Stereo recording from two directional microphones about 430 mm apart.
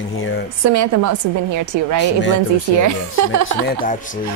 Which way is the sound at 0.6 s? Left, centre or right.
Right.